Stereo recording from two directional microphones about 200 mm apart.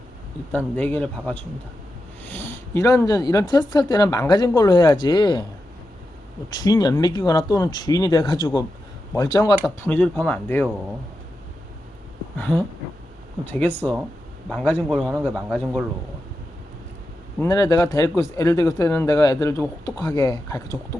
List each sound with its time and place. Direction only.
0.5 s speech: 10° left (ahead or behind)
6.5 s speech: 20° left (ahead or behind)
12.4 s a man's voice: 10° left (ahead or behind)
17.4 s speech: 15° left (ahead or behind)